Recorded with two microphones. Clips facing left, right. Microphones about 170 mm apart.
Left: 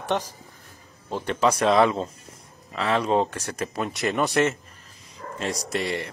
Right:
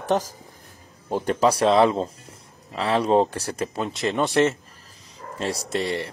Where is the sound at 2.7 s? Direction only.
35° right (ahead or behind).